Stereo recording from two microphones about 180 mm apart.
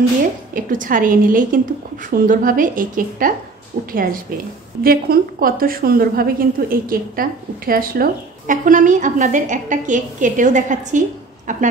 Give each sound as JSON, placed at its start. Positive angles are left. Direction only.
{"t": 0.7, "sound": "a woman's voice", "side_deg": -50}